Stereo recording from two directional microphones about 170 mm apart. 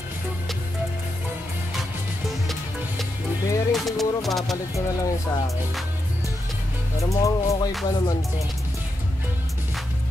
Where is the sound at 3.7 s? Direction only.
Centre (ahead or behind).